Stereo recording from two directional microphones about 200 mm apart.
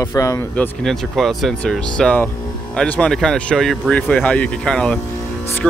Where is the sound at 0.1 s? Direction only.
15° left (ahead or behind).